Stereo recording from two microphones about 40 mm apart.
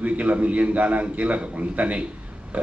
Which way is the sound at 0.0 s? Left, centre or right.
Right.